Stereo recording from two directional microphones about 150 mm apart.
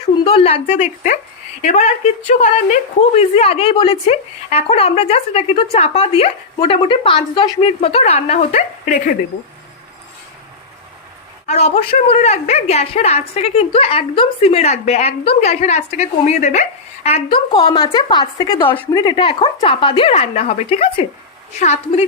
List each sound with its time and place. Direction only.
0.3 s a woman's voice: 40° left (ahead or behind)
3.2 s speech: 40° left (ahead or behind)
11.4 s a woman's voice: 45° left (ahead or behind)
17.2 s a woman's voice: 35° left (ahead or behind)